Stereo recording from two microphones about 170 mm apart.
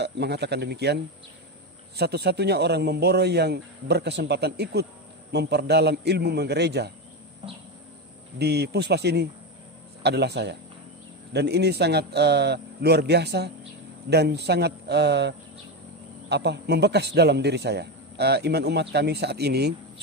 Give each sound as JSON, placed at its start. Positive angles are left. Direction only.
{"t": 0.0, "sound": "a man's voice", "side_deg": -80}
{"t": 8.4, "sound": "a man's voice", "side_deg": -75}